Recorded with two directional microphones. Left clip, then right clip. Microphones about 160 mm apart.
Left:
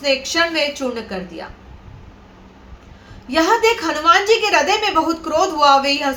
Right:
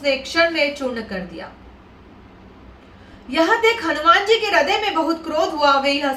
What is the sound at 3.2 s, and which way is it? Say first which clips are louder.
A woman's voice: left 2 dB; 20° left (ahead or behind).